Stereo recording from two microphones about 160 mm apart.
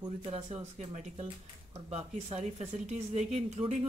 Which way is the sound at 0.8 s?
40° right (ahead or behind).